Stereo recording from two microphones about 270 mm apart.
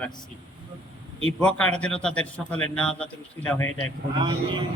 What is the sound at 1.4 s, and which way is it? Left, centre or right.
A man's voice, centre.